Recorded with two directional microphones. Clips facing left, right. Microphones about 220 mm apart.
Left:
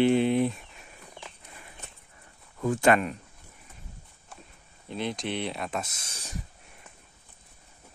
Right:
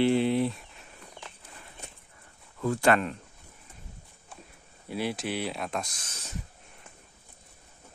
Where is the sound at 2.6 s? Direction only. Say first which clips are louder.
Left 1 dB; 20° left (ahead or behind).